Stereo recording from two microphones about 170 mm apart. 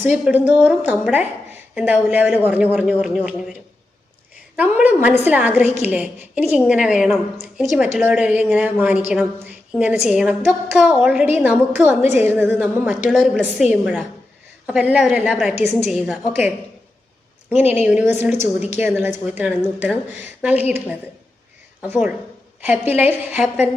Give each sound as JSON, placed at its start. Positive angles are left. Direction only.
{"t": 0.0, "sound": "a woman's voice", "side_deg": -10}
{"t": 4.5, "sound": "a woman's voice", "side_deg": -10}
{"t": 17.5, "sound": "a woman's voice", "side_deg": -10}
{"t": 18.3, "sound": "a woman's voice", "side_deg": 40}
{"t": 18.8, "sound": "a woman's voice", "side_deg": -10}
{"t": 21.8, "sound": "a woman's voice", "side_deg": -10}